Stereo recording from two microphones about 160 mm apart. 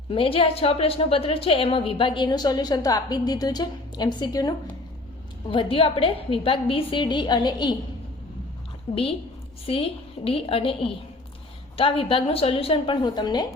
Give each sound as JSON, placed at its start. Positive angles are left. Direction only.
{"t": 0.1, "sound": "a woman's voice", "side_deg": 35}
{"t": 9.6, "sound": "a woman's voice", "side_deg": 35}